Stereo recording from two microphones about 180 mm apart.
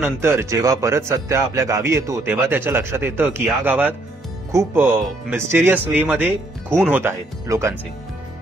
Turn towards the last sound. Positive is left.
turn(degrees=-15)  # may be behind; listen again after turning